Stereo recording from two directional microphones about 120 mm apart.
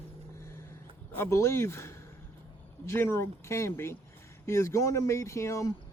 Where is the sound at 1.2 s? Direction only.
25° left (ahead or behind).